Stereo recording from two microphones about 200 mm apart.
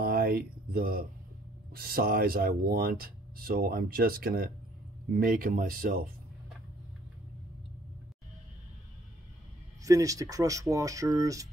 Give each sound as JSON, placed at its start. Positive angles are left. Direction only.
{"t": 0.0, "sound": "a sound", "side_deg": -50}
{"t": 1.7, "sound": "speech", "side_deg": -50}
{"t": 9.8, "sound": "speech", "side_deg": -15}